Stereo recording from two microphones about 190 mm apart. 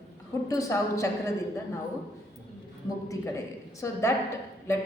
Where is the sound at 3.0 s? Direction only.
15° left (ahead or behind).